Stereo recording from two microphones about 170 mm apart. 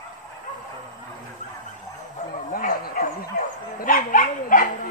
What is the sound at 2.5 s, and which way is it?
Dog, 55° left (ahead or behind).